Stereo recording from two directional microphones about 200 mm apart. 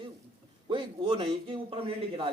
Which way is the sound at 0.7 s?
25° right (ahead or behind).